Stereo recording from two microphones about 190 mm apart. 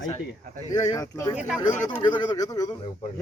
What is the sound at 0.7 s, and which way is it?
Speech, 15° left (ahead or behind).